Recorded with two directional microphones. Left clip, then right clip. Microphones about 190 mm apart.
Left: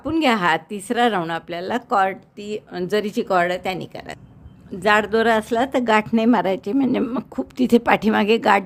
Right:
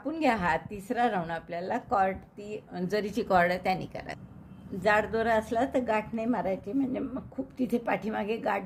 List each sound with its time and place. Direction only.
0.0 s a woman's voice: 35° left (ahead or behind)